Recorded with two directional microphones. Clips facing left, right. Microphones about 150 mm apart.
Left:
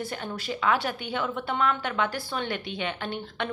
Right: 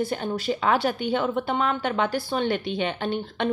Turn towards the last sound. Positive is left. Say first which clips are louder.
# right 5 dB
turn(degrees=-30)  # may be behind; listen again after turning